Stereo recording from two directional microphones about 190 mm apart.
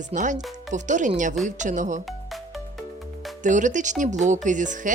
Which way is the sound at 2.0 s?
Centre (ahead or behind).